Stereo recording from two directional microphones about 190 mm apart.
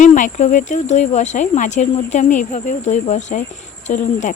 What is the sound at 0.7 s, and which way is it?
Speech, 40° left (ahead or behind).